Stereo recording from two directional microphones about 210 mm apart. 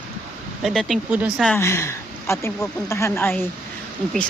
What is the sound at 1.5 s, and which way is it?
A woman's voice, 10° left (ahead or behind).